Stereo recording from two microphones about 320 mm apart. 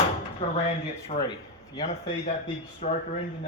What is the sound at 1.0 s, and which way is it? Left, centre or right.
A man's voice, centre.